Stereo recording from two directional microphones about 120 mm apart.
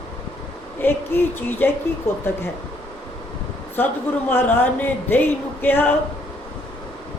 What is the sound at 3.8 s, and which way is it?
Speech, 15° left (ahead or behind).